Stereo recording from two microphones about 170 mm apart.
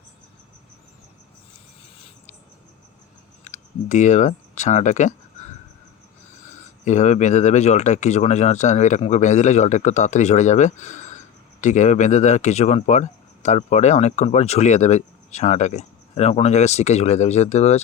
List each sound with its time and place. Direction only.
3.4 s speech: 45° left (ahead or behind)
6.5 s speech: 45° left (ahead or behind)